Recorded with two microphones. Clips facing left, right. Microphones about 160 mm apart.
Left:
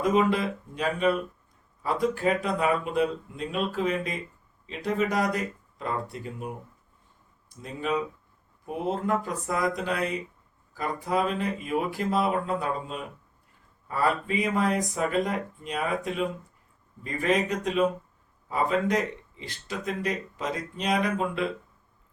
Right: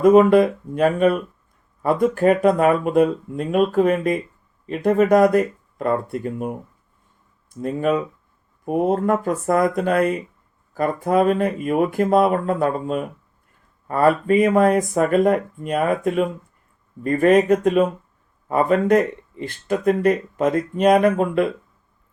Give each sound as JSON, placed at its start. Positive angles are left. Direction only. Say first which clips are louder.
{"t": 0.0, "sound": "speech", "louder": "right 11 dB", "side_deg": -50}
{"t": 7.5, "sound": "speech", "louder": "right 9 dB", "side_deg": -55}